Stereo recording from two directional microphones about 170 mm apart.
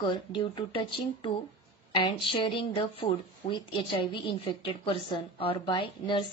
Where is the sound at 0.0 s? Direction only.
25° left (ahead or behind).